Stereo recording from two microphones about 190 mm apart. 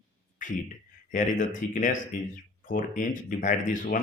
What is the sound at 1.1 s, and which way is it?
Speech, 45° left (ahead or behind).